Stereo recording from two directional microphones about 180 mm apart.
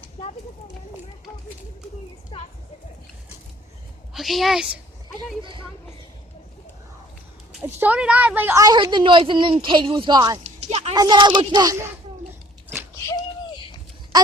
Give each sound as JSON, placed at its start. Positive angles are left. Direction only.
{"t": 2.3, "sound": "a child's voice", "side_deg": 30}
{"t": 4.1, "sound": "a woman's voice", "side_deg": 0}
{"t": 5.4, "sound": "a woman's voice", "side_deg": -30}
{"t": 7.8, "sound": "a woman's voice", "side_deg": -10}
{"t": 10.4, "sound": "a sound", "side_deg": -35}
{"t": 10.9, "sound": "a sound", "side_deg": -25}